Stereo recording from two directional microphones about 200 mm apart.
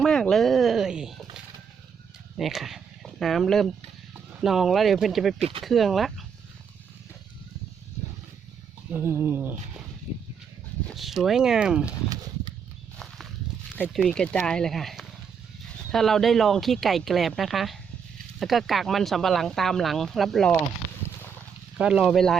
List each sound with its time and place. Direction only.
0.0 s a sound: 5° left (ahead or behind)
2.4 s speech: centre (ahead or behind)
5.4 s speech: 25° right (ahead or behind)
5.6 s speech: centre (ahead or behind)
8.9 s a sound: 10° right (ahead or behind)
10.8 s speech: centre (ahead or behind)
12.0 s a sound: 20° right (ahead or behind)
13.8 s speech: centre (ahead or behind)
21.8 s speech: 5° right (ahead or behind)